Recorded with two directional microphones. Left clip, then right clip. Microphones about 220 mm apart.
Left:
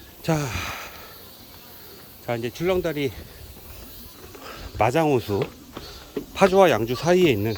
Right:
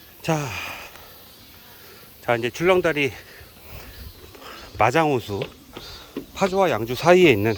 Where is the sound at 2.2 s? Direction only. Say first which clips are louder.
Right 5 dB; 15° right (ahead or behind).